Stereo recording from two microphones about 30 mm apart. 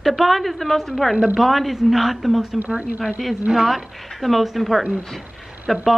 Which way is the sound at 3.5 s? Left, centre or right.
Right.